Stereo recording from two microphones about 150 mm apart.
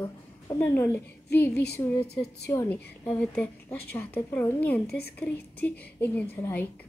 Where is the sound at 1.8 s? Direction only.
25° left (ahead or behind).